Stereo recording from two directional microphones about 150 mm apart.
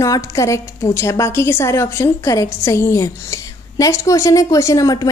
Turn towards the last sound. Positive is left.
turn(degrees=20)  # may be behind; listen again after turning